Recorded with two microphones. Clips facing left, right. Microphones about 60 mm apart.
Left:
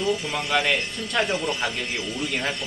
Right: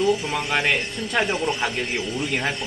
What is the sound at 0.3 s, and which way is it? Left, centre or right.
A man's voice, centre.